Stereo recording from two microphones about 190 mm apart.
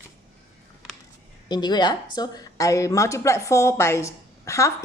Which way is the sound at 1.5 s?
20° left (ahead or behind).